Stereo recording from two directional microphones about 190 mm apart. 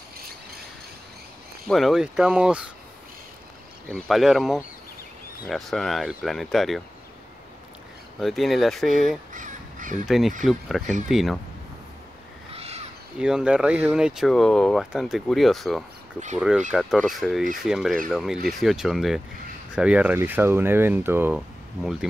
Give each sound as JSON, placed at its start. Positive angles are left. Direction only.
{"t": 1.7, "sound": "speech", "side_deg": 0}
{"t": 3.9, "sound": "speech", "side_deg": 0}
{"t": 8.2, "sound": "speech", "side_deg": 0}
{"t": 9.3, "sound": "crow", "side_deg": -45}
{"t": 10.0, "sound": "speech", "side_deg": 0}
{"t": 12.5, "sound": "crow", "side_deg": -35}
{"t": 13.2, "sound": "speech", "side_deg": -5}